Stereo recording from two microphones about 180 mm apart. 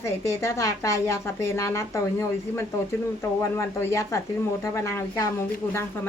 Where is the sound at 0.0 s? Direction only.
15° left (ahead or behind).